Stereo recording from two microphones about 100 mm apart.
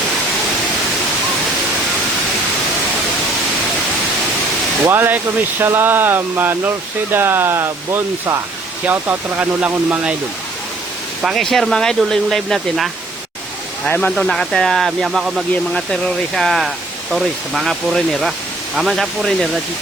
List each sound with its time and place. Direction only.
4.9 s speech: 20° right (ahead or behind)
11.2 s speech: centre (ahead or behind)
13.8 s speech: 15° left (ahead or behind)
14.2 s speech: 5° left (ahead or behind)
15.7 s speech: 5° left (ahead or behind)